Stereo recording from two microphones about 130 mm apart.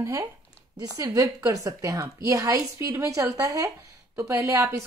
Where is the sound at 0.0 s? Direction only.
25° right (ahead or behind).